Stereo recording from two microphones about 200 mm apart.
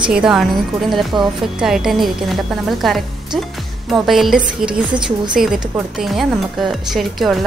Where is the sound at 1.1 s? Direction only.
20° right (ahead or behind).